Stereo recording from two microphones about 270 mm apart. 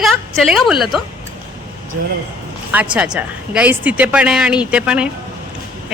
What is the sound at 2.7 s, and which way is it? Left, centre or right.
Speech, centre.